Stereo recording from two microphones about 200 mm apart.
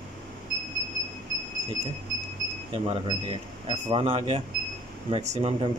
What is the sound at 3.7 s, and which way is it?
Speech, 25° right (ahead or behind).